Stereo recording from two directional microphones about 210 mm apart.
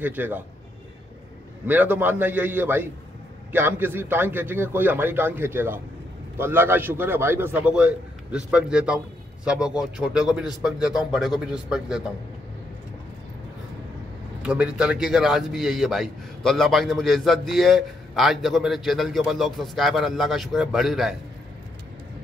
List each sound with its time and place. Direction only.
0.0 s a man's voice: 10° right (ahead or behind)
1.7 s a man's voice: 10° right (ahead or behind)
14.4 s a man's voice: 5° right (ahead or behind)